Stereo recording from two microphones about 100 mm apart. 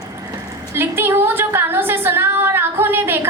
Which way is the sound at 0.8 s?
20° right (ahead or behind).